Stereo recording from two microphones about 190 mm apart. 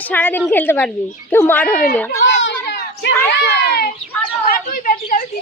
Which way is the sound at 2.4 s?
65° left (ahead or behind).